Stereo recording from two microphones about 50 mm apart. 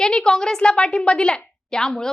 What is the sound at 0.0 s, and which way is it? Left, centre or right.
A woman's voice, centre.